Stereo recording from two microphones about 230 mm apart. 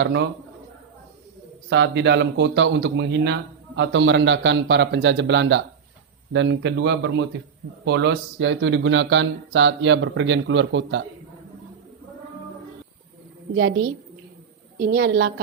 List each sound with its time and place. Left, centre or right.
0.0 s speech: right
1.7 s speech: right
14.8 s speech: right